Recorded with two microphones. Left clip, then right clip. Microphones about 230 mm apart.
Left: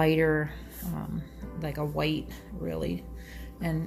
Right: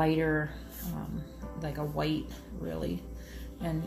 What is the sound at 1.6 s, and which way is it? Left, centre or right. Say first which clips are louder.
Speech: left 3 dB; left.